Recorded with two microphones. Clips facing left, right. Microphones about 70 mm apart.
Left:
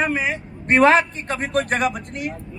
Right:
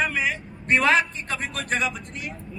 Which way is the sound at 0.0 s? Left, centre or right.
Left.